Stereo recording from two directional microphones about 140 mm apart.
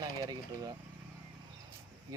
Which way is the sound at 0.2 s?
25° right (ahead or behind).